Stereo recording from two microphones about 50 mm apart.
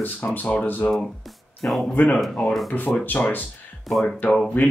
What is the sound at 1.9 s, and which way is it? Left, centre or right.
Speech, left.